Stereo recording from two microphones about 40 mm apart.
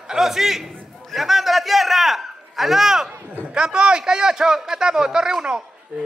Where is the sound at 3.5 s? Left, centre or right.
Centre.